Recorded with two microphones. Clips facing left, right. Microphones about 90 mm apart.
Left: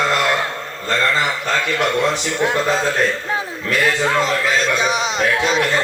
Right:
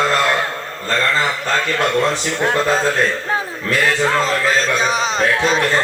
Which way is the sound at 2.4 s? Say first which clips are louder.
Right 2 dB; 40° right (ahead or behind).